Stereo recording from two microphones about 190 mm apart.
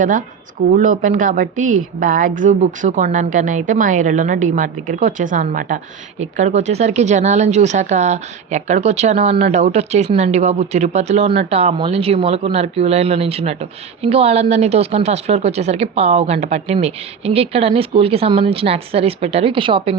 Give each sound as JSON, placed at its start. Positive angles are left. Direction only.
{"t": 0.0, "sound": "a woman's voice", "side_deg": -45}